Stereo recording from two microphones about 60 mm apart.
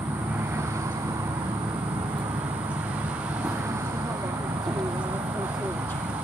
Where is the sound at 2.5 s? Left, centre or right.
Right.